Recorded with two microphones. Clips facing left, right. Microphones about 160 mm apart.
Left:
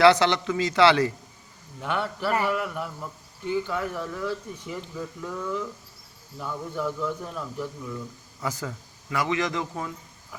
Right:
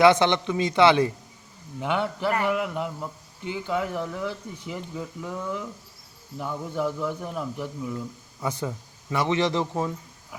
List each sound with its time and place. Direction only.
0.0 s speech: 20° right (ahead or behind)